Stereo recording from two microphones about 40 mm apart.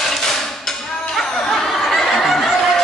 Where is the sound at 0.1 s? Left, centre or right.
Centre.